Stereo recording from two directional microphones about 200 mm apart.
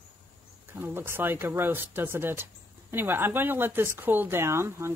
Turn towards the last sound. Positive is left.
turn(degrees=-15)  # may be behind; listen again after turning